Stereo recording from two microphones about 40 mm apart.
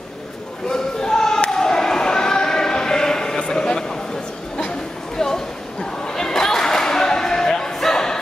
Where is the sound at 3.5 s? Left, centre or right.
Centre.